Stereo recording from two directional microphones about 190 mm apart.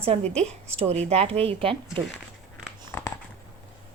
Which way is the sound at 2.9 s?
15° left (ahead or behind).